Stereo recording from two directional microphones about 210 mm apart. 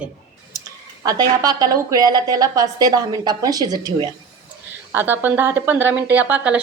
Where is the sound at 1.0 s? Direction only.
15° right (ahead or behind).